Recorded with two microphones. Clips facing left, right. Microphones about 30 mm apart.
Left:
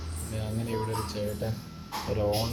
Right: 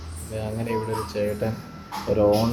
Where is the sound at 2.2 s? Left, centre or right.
Centre.